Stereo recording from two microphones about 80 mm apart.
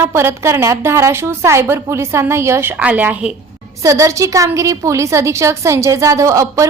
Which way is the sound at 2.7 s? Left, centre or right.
Centre.